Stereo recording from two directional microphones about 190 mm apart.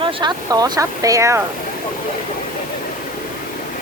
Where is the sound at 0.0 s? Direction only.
25° right (ahead or behind).